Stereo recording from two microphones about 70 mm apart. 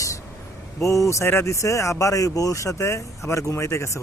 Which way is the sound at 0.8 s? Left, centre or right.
Left.